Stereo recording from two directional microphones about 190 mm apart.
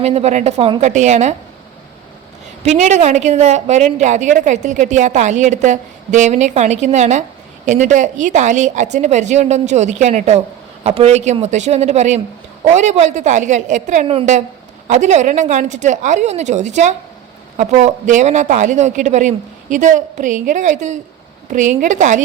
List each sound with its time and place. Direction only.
0.0 s a woman's voice: 35° right (ahead or behind)
2.6 s a woman's voice: 35° right (ahead or behind)